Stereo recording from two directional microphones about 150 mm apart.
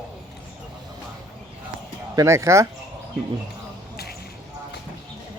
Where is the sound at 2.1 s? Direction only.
20° right (ahead or behind).